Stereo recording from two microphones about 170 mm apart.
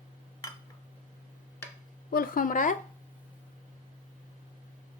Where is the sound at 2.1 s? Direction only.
55° left (ahead or behind).